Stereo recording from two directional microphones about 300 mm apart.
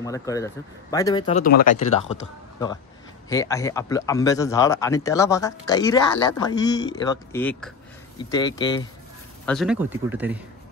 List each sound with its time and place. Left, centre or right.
0.0 s speech: centre
3.3 s speech: centre
9.5 s speech: centre